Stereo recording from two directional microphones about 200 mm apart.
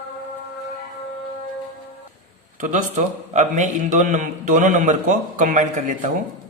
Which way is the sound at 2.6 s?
35° right (ahead or behind).